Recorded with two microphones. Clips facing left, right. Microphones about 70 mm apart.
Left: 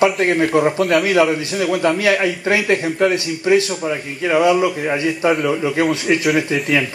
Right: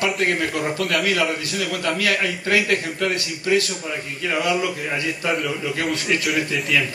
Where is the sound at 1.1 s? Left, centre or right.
Left.